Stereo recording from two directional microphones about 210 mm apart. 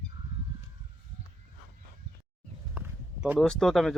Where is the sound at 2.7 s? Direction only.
10° right (ahead or behind).